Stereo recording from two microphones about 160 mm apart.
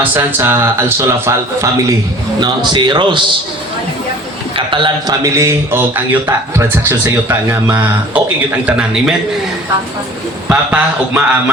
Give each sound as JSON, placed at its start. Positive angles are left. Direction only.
{"t": 0.0, "sound": "speech", "side_deg": -15}
{"t": 2.6, "sound": "speech", "side_deg": -30}
{"t": 4.5, "sound": "speech", "side_deg": -30}
{"t": 8.6, "sound": "a man's voice", "side_deg": -5}
{"t": 10.5, "sound": "speech", "side_deg": -10}